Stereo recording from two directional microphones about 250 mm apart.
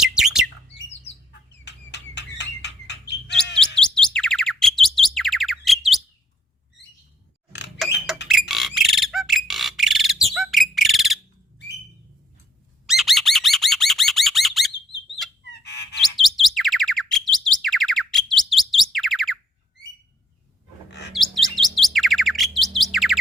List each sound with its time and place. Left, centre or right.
0.0 s bird: centre
1.0 s chicken: left
3.3 s chirp: centre
7.8 s rodents: centre
8.3 s bird: centre
12.9 s a sound: centre
15.2 s bird: centre
15.6 s chirp: left
16.1 s bird: centre
21.1 s bird: centre